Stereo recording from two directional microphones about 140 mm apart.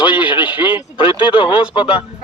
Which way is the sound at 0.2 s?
10° right (ahead or behind).